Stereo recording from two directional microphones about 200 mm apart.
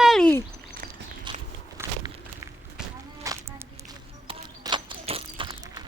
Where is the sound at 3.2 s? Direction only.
15° right (ahead or behind).